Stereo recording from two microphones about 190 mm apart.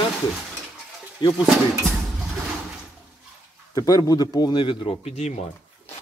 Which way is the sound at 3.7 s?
20° left (ahead or behind).